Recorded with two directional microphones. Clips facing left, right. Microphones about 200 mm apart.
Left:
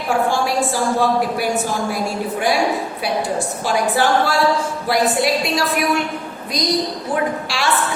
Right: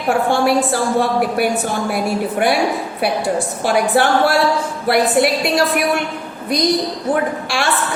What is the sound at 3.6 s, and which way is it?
A woman's voice, 60° right (ahead or behind).